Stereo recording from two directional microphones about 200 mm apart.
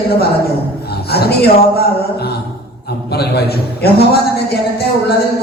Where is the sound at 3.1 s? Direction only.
55° left (ahead or behind).